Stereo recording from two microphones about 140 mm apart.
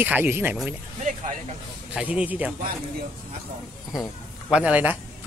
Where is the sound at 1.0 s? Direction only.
60° right (ahead or behind).